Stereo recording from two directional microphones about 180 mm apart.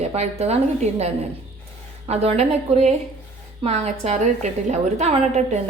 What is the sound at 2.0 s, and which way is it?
Speech, 35° right (ahead or behind).